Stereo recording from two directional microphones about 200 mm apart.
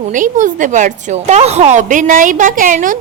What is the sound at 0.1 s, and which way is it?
A woman's voice, 40° right (ahead or behind).